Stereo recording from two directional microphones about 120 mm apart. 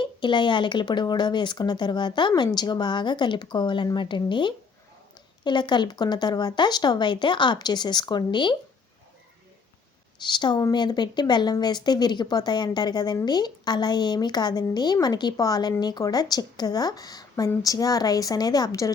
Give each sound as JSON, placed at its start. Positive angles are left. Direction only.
{"t": 0.0, "sound": "speech", "side_deg": 40}
{"t": 10.2, "sound": "speech", "side_deg": 40}